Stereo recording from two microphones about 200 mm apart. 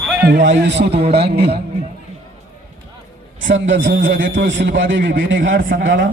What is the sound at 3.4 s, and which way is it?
A man's voice, 70° right (ahead or behind).